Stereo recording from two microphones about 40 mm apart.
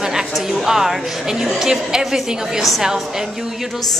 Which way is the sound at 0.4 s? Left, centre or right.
Centre.